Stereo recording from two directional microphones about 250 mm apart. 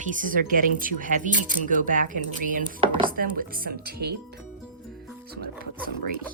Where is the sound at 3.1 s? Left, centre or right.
Right.